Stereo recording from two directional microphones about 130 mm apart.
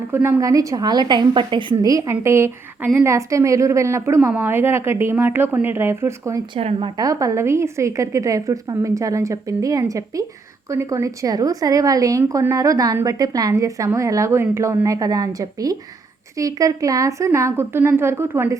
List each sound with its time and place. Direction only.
0.1 s a woman's voice: 20° right (ahead or behind); by 1.6 s 40° right (ahead or behind)
1.7 s a woman's voice: 25° right (ahead or behind)
6.5 s speech: 45° right (ahead or behind)
6.9 s a woman's voice: 25° right (ahead or behind)